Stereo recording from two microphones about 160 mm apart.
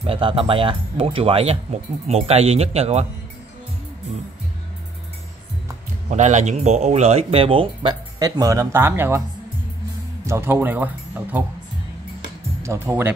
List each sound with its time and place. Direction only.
0.0 s speech: 35° right (ahead or behind)
6.0 s speech: 45° right (ahead or behind); by 9.2 s 15° right (ahead or behind)
10.2 s speech: 15° right (ahead or behind)
12.6 s speech: 15° right (ahead or behind)